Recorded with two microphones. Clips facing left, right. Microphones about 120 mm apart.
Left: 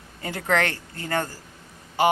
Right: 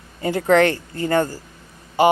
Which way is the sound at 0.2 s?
20° right (ahead or behind).